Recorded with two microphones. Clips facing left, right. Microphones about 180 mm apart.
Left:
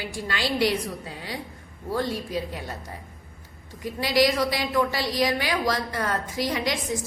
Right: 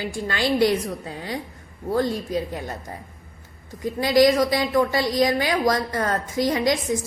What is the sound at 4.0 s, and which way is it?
A woman's voice, 50° right (ahead or behind).